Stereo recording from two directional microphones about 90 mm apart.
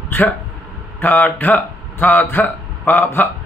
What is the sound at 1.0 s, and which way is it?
A man's voice, 20° left (ahead or behind).